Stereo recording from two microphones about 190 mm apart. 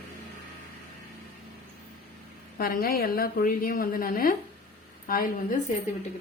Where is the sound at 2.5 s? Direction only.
50° left (ahead or behind).